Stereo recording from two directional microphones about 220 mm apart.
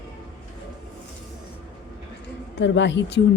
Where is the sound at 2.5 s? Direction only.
55° left (ahead or behind).